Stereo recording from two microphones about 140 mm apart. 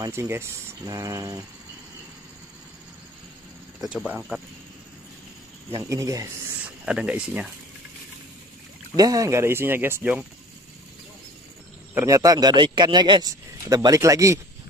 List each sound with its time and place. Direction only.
0.0 s a man's voice: 20° right (ahead or behind)
3.8 s speech: 5° right (ahead or behind)
5.9 s a man's voice: 20° right (ahead or behind)
6.9 s speech: 10° right (ahead or behind)
8.9 s speech: 25° right (ahead or behind)
11.9 s a man's voice: 20° right (ahead or behind)